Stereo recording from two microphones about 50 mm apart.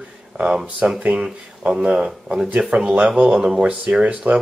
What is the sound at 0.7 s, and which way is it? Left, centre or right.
Speech, centre.